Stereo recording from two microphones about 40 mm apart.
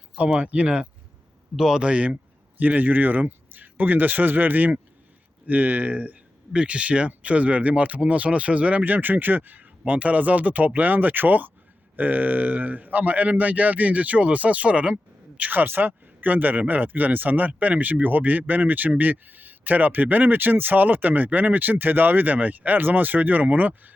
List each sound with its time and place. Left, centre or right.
0.2 s a man's voice: right
1.5 s a man's voice: centre
1.8 s a man's voice: right
2.6 s speech: right
6.5 s a man's voice: right
8.8 s a man's voice: right
15.4 s speech: right